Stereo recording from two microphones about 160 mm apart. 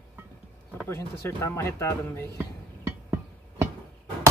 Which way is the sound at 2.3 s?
15° right (ahead or behind).